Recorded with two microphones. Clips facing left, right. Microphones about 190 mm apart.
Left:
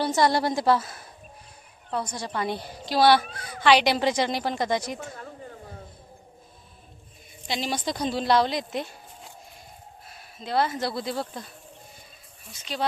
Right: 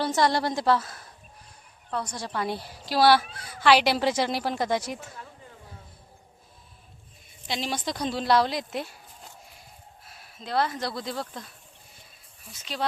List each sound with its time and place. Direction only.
0.2 s a woman's voice: 5° left (ahead or behind)
4.9 s a sound: 50° left (ahead or behind)
7.4 s speech: centre (ahead or behind)
12.7 s a woman's voice: centre (ahead or behind)